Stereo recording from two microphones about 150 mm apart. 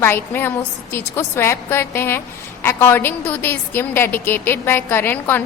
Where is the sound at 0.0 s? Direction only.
15° left (ahead or behind).